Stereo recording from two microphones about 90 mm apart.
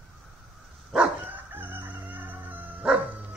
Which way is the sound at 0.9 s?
20° right (ahead or behind).